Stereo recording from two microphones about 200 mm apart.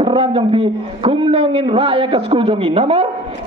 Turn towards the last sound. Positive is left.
turn(degrees=-30)  # may be behind; listen again after turning